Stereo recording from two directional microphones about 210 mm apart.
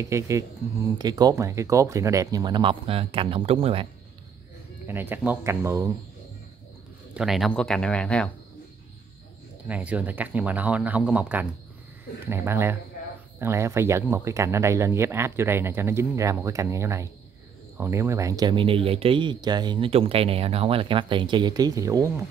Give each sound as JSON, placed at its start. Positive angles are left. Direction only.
{"t": 0.0, "sound": "speech", "side_deg": -15}
{"t": 4.8, "sound": "speech", "side_deg": -10}
{"t": 7.2, "sound": "speech", "side_deg": 0}
{"t": 9.7, "sound": "speech", "side_deg": -5}